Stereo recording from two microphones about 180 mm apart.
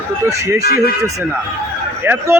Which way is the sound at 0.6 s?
60° left (ahead or behind).